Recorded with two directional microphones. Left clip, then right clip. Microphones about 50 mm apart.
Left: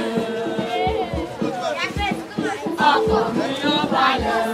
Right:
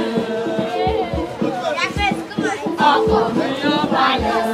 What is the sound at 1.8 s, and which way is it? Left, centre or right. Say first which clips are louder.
Music: right 4 dB; right.